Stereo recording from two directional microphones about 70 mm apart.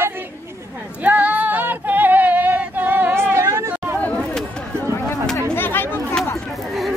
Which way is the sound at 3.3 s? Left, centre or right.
Right.